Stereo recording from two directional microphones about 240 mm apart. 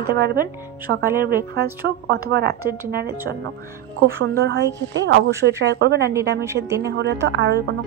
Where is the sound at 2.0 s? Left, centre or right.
Right.